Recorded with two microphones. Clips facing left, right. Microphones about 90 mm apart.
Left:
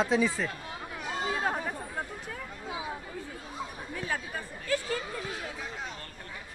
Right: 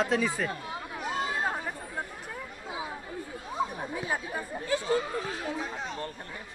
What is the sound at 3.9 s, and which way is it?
Chatter, 15° right (ahead or behind).